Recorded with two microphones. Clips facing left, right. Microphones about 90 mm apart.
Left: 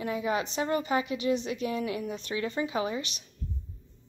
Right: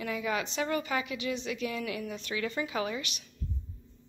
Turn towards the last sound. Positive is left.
turn(degrees=30)  # may be behind; listen again after turning